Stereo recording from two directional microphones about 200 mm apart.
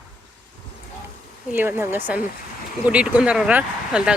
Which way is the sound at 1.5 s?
10° right (ahead or behind).